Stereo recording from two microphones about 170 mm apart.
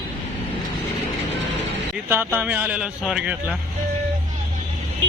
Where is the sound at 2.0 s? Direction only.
10° right (ahead or behind).